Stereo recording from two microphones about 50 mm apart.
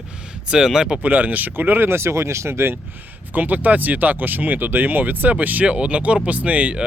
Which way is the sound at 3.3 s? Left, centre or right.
Right.